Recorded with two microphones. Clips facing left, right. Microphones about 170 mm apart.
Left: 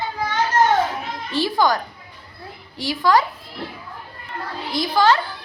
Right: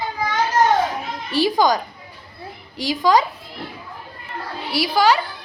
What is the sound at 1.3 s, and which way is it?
A child's voice, 15° right (ahead or behind).